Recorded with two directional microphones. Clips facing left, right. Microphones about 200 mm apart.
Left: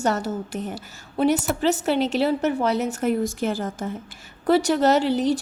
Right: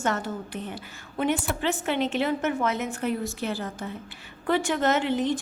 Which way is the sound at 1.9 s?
35° left (ahead or behind).